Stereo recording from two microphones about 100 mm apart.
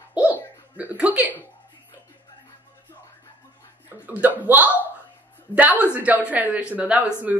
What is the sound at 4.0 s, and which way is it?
Speech, 15° right (ahead or behind).